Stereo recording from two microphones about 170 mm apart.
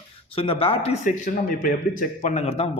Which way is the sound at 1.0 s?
50° left (ahead or behind).